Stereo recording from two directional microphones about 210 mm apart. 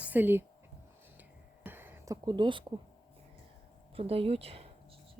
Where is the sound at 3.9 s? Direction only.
25° right (ahead or behind).